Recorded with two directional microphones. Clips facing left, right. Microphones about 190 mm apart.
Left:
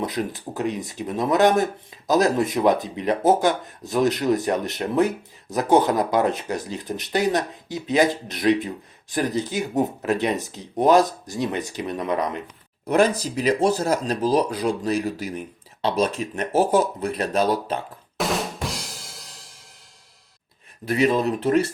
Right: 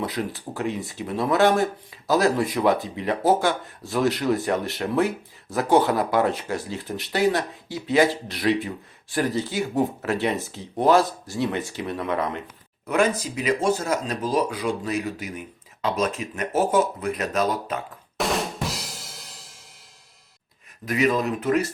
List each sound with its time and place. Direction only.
0.0 s speech: 20° left (ahead or behind)
12.9 s speech: 35° left (ahead or behind)
18.2 s drum: centre (ahead or behind)
20.8 s speech: 30° left (ahead or behind)